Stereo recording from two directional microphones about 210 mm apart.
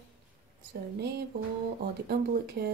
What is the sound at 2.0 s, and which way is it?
Speech, 45° right (ahead or behind).